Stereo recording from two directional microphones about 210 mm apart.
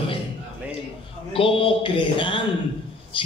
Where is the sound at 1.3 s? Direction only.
25° left (ahead or behind).